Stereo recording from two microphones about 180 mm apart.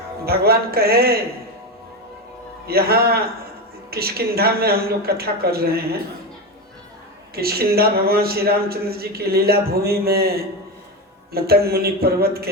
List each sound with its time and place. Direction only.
0.3 s a man's voice: 60° right (ahead or behind)
2.6 s a man's voice: 60° right (ahead or behind)
7.3 s a man's voice: 60° right (ahead or behind)